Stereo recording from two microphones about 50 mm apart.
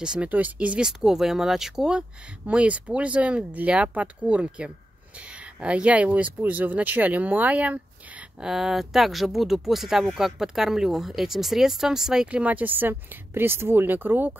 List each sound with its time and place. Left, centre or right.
0.0 s speech: centre
0.3 s speech: right
0.7 s speech: centre
2.4 s speech: right
8.4 s speech: centre
12.3 s speech: right